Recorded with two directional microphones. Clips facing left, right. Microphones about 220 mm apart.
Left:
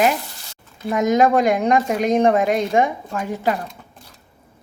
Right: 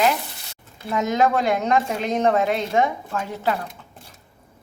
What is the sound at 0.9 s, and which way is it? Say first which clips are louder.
A woman's voice: left 4 dB; 15° left (ahead or behind).